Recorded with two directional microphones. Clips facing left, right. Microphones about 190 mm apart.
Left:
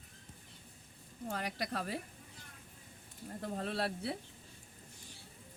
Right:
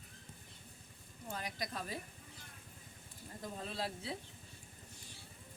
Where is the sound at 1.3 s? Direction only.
65° left (ahead or behind).